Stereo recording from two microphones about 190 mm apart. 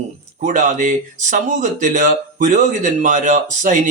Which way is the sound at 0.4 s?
40° right (ahead or behind).